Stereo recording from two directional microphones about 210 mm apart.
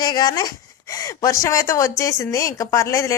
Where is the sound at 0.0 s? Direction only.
20° left (ahead or behind).